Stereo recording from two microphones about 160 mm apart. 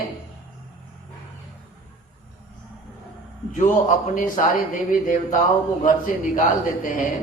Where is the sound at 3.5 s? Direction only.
55° left (ahead or behind).